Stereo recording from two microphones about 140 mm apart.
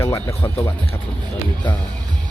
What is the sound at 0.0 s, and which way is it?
Speech, 20° left (ahead or behind).